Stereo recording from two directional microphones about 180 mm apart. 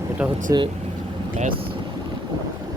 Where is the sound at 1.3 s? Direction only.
45° right (ahead or behind).